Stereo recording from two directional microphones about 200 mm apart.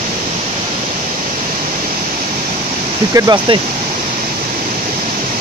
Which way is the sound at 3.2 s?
20° right (ahead or behind).